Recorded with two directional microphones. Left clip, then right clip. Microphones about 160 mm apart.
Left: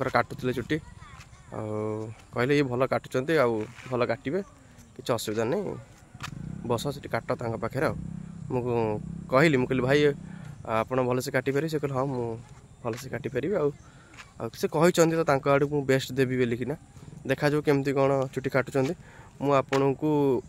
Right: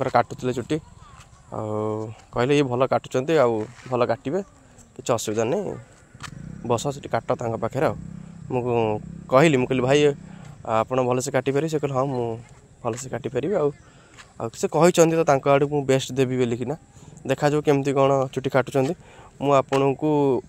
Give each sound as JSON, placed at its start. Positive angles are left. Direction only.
{"t": 0.0, "sound": "speech", "side_deg": -15}
{"t": 3.5, "sound": "speech", "side_deg": -45}
{"t": 3.9, "sound": "speech", "side_deg": -15}
{"t": 6.2, "sound": "speech", "side_deg": -45}
{"t": 6.7, "sound": "speech", "side_deg": -20}